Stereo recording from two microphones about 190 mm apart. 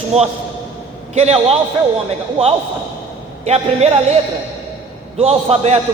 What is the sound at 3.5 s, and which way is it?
Speech, 35° right (ahead or behind).